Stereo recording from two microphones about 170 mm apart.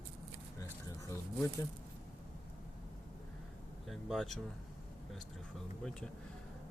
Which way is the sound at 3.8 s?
Centre (ahead or behind).